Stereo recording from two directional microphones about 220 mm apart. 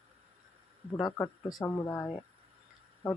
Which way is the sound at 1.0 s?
15° left (ahead or behind).